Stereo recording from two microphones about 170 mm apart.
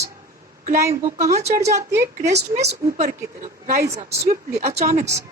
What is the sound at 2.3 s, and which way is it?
Speech, 40° right (ahead or behind).